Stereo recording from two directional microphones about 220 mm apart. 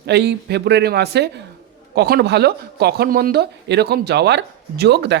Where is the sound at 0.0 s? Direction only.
50° right (ahead or behind).